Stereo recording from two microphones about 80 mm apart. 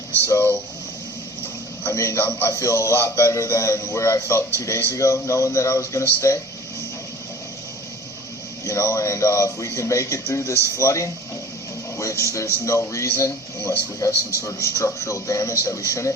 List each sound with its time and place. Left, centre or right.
0.3 s speech: left
2.0 s speech: left
8.6 s speech: left
12.2 s speech: left